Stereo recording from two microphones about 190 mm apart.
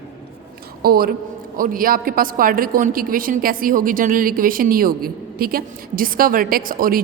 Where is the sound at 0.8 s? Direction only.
50° right (ahead or behind).